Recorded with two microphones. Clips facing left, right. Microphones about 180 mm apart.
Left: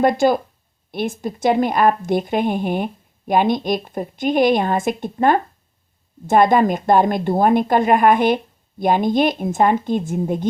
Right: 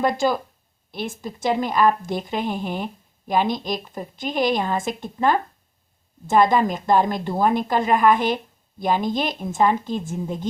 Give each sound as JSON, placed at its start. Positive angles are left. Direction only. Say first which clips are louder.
{"t": 0.0, "sound": "a woman's voice", "louder": "left 5 dB", "side_deg": 50}